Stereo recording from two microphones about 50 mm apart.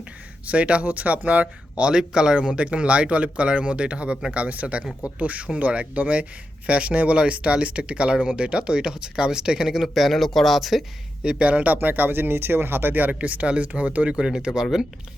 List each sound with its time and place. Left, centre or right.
0.4 s speech: right
9.8 s speech: centre
11.2 s speech: centre
14.2 s speech: centre